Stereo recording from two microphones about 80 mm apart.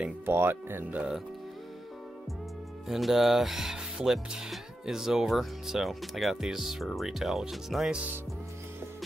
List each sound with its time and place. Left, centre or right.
0.3 s speech: right
2.9 s speech: centre